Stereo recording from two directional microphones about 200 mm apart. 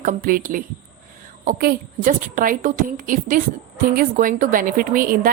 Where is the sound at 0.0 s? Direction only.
45° right (ahead or behind).